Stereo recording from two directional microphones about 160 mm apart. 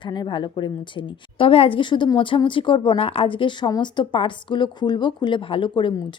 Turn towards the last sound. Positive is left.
turn(degrees=30)  # may be behind; listen again after turning